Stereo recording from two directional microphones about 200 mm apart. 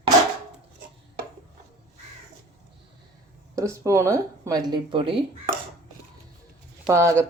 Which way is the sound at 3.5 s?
15° right (ahead or behind).